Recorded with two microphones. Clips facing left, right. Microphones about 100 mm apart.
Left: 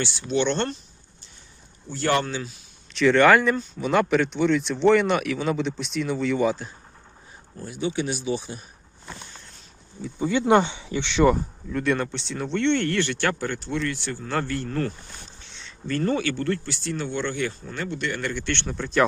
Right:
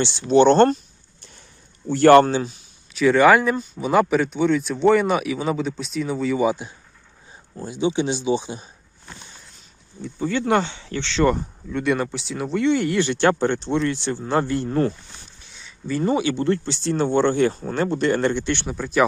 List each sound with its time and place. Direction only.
0.0 s speech: 30° right (ahead or behind); by 0.8 s 45° right (ahead or behind)
1.9 s speech: 55° right (ahead or behind)
2.9 s speech: 5° right (ahead or behind)
7.5 s speech: 25° right (ahead or behind)
10.2 s speech: 15° left (ahead or behind)
11.3 s speech: centre (ahead or behind); by 14.9 s 25° right (ahead or behind)
15.5 s a sound: 5° right (ahead or behind)
16.4 s speech: 25° right (ahead or behind)
18.5 s speech: 10° right (ahead or behind)